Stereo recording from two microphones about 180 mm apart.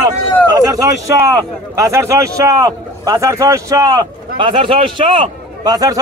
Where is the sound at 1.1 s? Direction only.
20° right (ahead or behind).